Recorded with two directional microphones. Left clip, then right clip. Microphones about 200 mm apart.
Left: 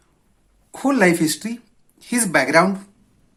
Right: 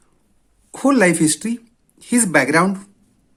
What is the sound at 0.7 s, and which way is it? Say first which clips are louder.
Speech: right 2 dB; 30° right (ahead or behind).